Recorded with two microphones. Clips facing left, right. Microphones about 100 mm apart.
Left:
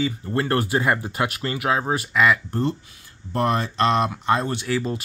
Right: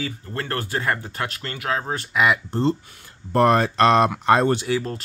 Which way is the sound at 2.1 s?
15° right (ahead or behind).